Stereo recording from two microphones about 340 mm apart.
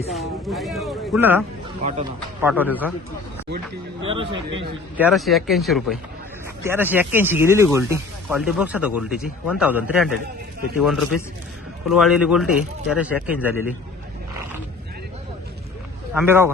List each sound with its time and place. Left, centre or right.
0.1 s speech: centre
1.8 s speech: right
2.4 s speech: centre
4.0 s speech: centre
4.9 s speech: centre
16.2 s speech: centre